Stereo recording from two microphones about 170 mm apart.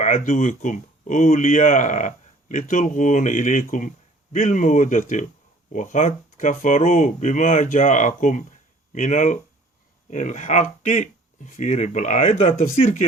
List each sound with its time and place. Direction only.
0.0 s speech: 45° left (ahead or behind)